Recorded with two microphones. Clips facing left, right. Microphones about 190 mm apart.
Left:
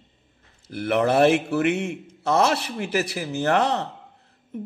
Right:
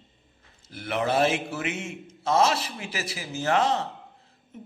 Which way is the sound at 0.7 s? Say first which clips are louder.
Left 6 dB; 60° left (ahead or behind).